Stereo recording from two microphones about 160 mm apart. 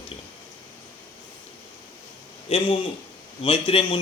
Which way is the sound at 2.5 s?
35° left (ahead or behind).